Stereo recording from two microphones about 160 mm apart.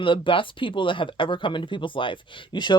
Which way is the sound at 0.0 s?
30° left (ahead or behind).